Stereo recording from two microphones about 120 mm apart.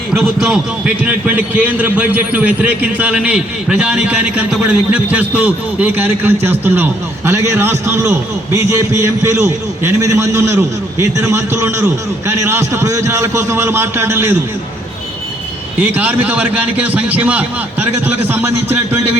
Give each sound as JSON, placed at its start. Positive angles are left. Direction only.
{"t": 0.3, "sound": "a man's voice", "side_deg": -5}
{"t": 15.8, "sound": "a man's voice", "side_deg": -15}